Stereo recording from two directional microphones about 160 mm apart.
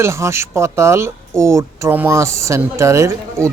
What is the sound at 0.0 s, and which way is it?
Speech, 15° right (ahead or behind).